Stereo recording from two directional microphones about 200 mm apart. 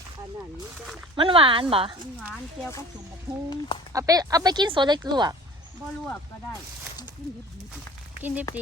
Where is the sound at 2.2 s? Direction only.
5° right (ahead or behind).